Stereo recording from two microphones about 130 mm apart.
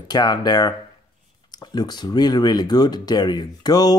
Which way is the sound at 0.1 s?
30° left (ahead or behind).